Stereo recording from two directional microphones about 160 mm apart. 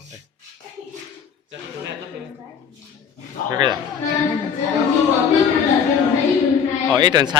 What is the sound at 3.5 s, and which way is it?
Speech, 25° right (ahead or behind).